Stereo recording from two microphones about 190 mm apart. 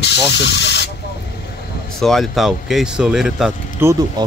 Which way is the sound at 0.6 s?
65° left (ahead or behind).